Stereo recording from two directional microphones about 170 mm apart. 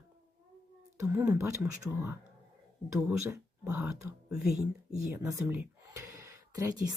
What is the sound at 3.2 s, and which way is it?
Speech, 15° right (ahead or behind).